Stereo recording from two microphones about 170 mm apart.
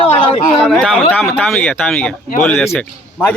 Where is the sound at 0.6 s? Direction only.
Centre (ahead or behind).